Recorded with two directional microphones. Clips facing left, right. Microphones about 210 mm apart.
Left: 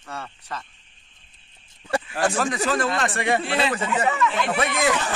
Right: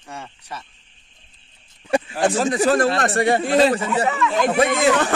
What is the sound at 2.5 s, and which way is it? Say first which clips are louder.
A man's voice: right 6 dB; 35° right (ahead or behind).